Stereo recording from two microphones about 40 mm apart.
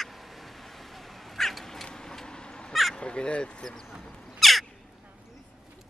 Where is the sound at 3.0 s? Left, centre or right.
Left.